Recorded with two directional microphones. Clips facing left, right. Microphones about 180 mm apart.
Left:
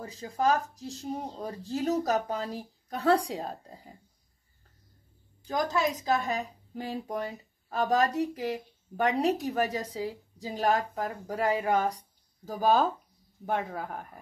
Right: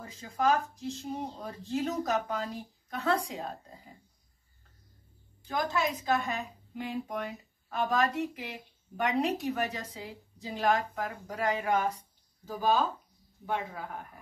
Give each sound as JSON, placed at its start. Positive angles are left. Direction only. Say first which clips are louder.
{"t": 0.0, "sound": "a woman's voice", "louder": "left 1 dB", "side_deg": 40}
{"t": 5.5, "sound": "a woman's voice", "louder": "left 3 dB", "side_deg": 40}